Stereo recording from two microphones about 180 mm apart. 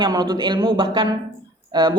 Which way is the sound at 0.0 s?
20° right (ahead or behind).